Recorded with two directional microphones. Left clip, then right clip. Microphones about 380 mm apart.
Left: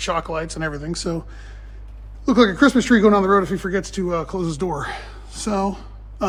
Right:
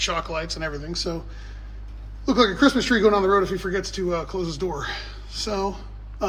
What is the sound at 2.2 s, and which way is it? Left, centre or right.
Speech, left.